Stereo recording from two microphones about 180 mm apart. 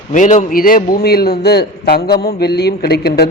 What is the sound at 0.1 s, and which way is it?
A man's voice, 45° left (ahead or behind).